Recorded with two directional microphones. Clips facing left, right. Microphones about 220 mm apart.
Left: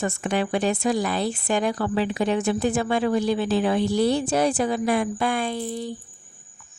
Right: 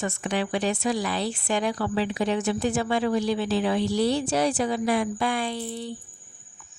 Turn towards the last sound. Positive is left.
turn(degrees=45)  # may be behind; listen again after turning